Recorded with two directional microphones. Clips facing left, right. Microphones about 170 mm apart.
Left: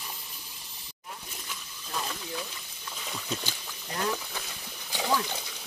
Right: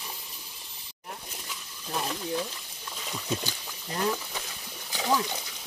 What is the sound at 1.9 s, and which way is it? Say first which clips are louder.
Stir: right 3 dB; 30° right (ahead or behind).